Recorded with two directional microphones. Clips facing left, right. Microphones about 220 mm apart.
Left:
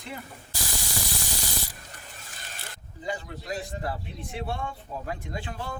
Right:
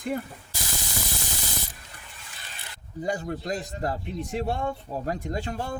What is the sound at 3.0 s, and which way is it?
A man's voice, 45° right (ahead or behind).